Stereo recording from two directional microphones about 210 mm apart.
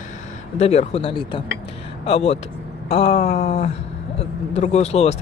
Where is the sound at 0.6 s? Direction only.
30° left (ahead or behind).